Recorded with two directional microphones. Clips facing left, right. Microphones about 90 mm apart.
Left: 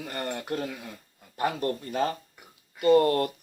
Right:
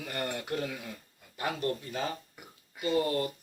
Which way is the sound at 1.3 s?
50° left (ahead or behind).